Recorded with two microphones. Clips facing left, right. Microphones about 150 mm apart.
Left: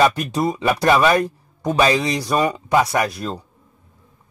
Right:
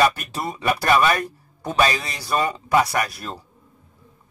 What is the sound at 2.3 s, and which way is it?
Speech, 15° left (ahead or behind).